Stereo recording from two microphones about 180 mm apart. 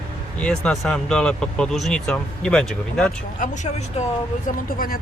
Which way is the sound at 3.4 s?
40° left (ahead or behind).